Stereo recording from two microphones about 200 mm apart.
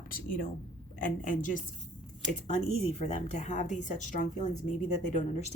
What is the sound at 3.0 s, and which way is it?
Speech, 35° left (ahead or behind).